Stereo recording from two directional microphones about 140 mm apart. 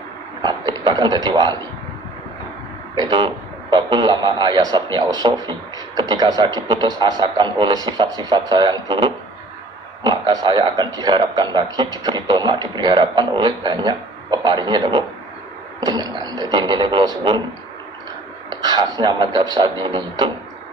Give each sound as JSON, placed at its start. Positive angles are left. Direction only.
{"t": 0.4, "sound": "a sound", "side_deg": -30}
{"t": 3.0, "sound": "a man's voice", "side_deg": -30}
{"t": 18.6, "sound": "speech", "side_deg": -30}